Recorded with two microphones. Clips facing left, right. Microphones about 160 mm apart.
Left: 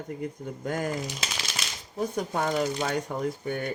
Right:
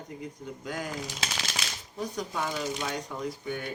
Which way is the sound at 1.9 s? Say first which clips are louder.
Left 5 dB; 50° left (ahead or behind).